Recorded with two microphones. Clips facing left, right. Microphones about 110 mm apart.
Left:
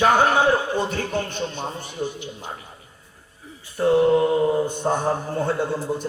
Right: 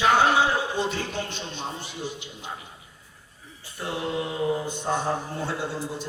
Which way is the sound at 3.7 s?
45° left (ahead or behind).